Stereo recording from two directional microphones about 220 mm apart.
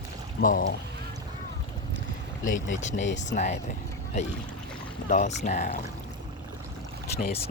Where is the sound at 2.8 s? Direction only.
30° left (ahead or behind).